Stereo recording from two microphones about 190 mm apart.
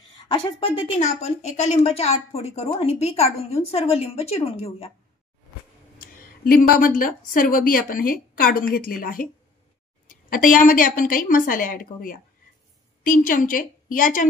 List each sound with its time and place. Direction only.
0.6 s a woman's voice: 30° left (ahead or behind)
5.9 s a woman's voice: 50° left (ahead or behind)